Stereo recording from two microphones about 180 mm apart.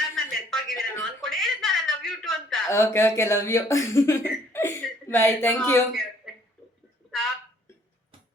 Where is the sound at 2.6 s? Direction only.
15° left (ahead or behind).